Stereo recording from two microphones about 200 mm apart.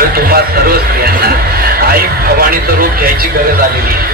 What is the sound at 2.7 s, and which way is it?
Speech, 45° right (ahead or behind).